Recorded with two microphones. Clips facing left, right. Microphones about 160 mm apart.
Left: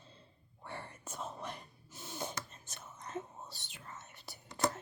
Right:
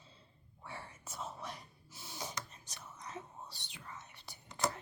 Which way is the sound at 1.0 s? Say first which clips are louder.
Left 1 dB; 10° right (ahead or behind).